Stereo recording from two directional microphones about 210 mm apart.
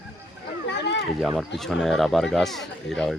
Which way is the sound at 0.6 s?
55° left (ahead or behind).